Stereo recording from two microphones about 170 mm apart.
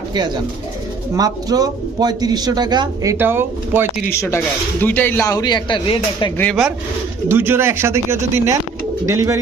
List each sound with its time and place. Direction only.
1.1 s a man's voice: 20° right (ahead or behind)
4.1 s speech: 15° left (ahead or behind)
6.3 s speech: 10° left (ahead or behind)
7.3 s speech: 15° right (ahead or behind)